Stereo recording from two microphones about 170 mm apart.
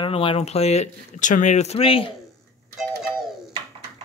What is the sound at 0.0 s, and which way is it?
Speech, 30° left (ahead or behind).